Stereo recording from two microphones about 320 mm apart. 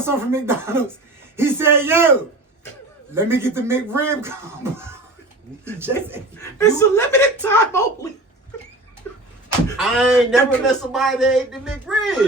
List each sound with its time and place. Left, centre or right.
0.0 s speech: centre
3.2 s speech: centre
5.8 s speech: centre
6.4 s speech: centre
9.7 s speech: centre